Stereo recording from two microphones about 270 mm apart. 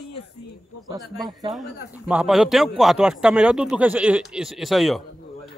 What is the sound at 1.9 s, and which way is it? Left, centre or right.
A man's voice, centre.